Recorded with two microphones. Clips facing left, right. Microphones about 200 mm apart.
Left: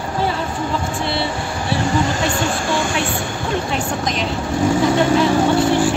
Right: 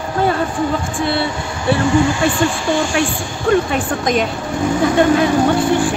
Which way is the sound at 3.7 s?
50° right (ahead or behind).